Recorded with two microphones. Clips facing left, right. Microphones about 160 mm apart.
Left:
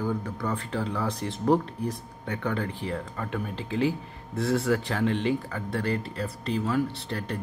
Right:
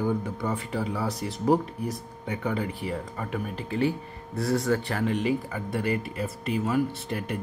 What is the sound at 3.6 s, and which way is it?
Speech, 90° left.